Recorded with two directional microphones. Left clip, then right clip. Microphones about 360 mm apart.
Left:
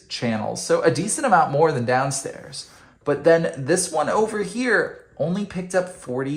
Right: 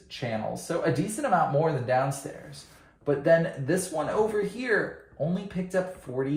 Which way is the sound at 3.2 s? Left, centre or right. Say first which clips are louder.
Left 6 dB; centre.